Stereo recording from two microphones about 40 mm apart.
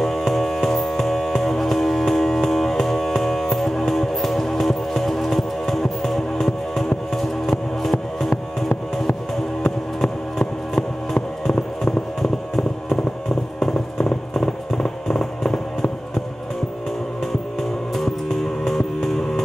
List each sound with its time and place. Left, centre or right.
0.0 s music: centre
9.6 s music: left
11.4 s music: centre
13.6 s a sound: centre
17.9 s music: centre